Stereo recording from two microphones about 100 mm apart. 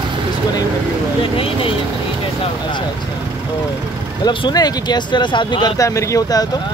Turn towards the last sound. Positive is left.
turn(degrees=40)  # may be behind; listen again after turning